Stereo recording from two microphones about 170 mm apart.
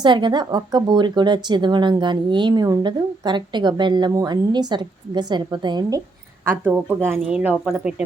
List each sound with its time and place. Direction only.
0.0 s speech: 25° right (ahead or behind)
6.4 s a woman's voice: 15° right (ahead or behind)